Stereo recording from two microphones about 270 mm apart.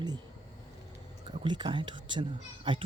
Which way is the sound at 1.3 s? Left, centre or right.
Centre.